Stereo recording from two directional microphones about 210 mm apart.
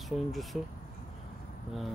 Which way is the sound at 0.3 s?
Centre (ahead or behind).